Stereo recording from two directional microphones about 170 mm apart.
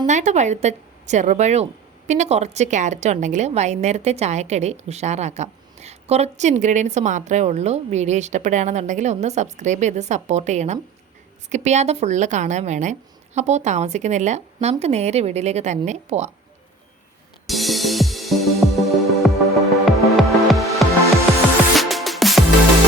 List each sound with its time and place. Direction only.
0.0 s a woman's voice: 45° right (ahead or behind)
17.4 s music: centre (ahead or behind)